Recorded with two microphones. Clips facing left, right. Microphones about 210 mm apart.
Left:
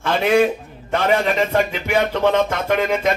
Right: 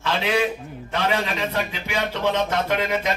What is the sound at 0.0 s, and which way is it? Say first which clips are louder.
A man's voice: left 6 dB; 50° left (ahead or behind).